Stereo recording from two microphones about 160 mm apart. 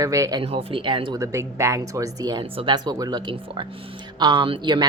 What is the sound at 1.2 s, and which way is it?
Speech, 20° right (ahead or behind).